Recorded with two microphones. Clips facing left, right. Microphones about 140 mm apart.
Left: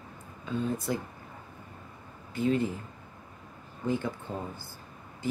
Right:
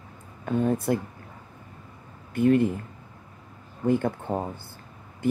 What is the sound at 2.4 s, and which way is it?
Speech, 60° right (ahead or behind).